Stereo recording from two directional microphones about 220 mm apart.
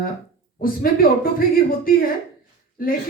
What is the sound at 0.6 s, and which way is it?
Speech, 40° left (ahead or behind).